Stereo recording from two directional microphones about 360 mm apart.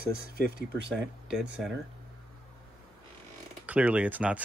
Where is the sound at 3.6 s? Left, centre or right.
Centre.